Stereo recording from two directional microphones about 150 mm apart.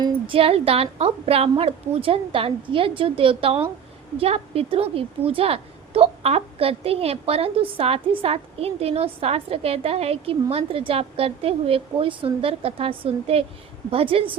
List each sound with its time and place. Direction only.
0.0 s a woman's voice: 35° right (ahead or behind)